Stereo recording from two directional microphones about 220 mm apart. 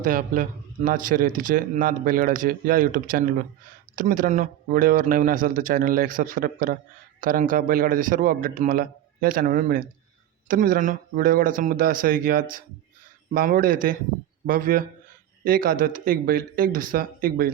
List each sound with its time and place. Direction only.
0.0 s speech: 40° right (ahead or behind)